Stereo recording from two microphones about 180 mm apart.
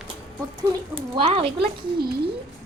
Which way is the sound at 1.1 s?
30° right (ahead or behind).